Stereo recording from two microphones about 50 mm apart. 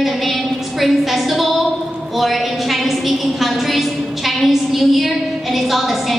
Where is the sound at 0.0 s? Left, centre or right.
Centre.